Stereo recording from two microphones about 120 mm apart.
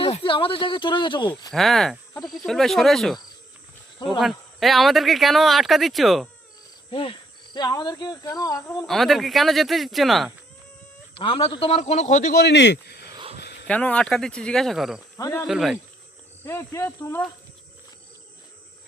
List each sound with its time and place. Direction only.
0.0 s speech: 50° left (ahead or behind)
1.5 s speech: centre (ahead or behind)
3.9 s speech: 45° left (ahead or behind)
4.2 s speech: centre (ahead or behind)
6.9 s cricket: 45° left (ahead or behind)
8.9 s speech: centre (ahead or behind)
11.1 s a man's voice: 50° left (ahead or behind)
11.8 s speech: 70° left (ahead or behind)
13.7 s speech: 10° left (ahead or behind)
15.2 s cricket: 25° left (ahead or behind)
15.4 s speech: 5° right (ahead or behind)
16.4 s cricket: 20° left (ahead or behind)